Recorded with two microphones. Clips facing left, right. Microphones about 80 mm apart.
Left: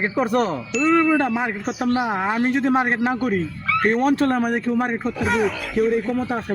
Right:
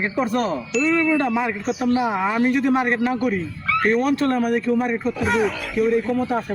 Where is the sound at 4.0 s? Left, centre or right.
Left.